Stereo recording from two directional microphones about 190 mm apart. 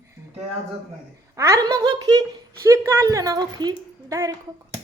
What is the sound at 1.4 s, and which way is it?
A woman's voice, 15° right (ahead or behind).